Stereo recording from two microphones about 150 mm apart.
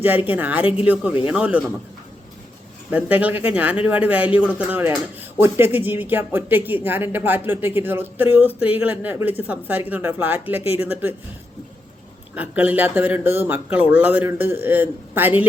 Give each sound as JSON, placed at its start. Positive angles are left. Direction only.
{"t": 0.0, "sound": "speech", "side_deg": -10}
{"t": 0.6, "sound": "speech", "side_deg": 35}
{"t": 0.9, "sound": "speech", "side_deg": -10}
{"t": 2.9, "sound": "speech", "side_deg": -10}
{"t": 12.3, "sound": "speech", "side_deg": -10}